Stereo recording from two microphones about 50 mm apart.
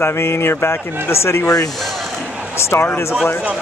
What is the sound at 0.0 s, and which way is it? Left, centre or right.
Speech, left.